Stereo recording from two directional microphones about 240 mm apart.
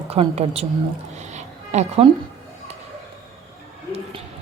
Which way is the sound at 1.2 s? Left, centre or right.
Right.